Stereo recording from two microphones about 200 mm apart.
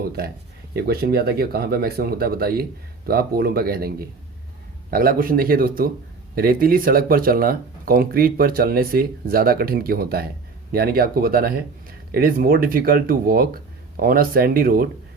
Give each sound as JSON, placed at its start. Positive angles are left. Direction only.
{"t": 0.8, "sound": "speech", "side_deg": -50}